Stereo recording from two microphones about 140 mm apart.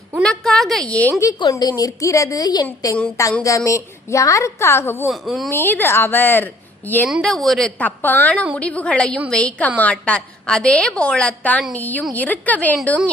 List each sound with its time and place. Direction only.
0.2 s a woman's voice: 5° left (ahead or behind)
1.2 s a woman's voice: 25° left (ahead or behind)
5.0 s a woman's voice: centre (ahead or behind)
5.5 s a woman's voice: 15° left (ahead or behind)
7.1 s a woman's voice: centre (ahead or behind)